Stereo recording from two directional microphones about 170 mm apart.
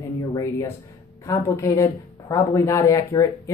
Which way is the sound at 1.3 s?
20° left (ahead or behind).